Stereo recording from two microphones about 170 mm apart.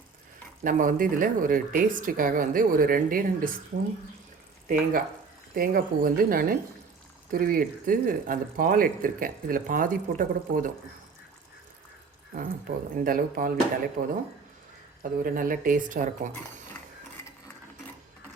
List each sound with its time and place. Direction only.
0.6 s speech: 55° right (ahead or behind)
12.3 s speech: 55° right (ahead or behind)
15.2 s speech: 55° right (ahead or behind)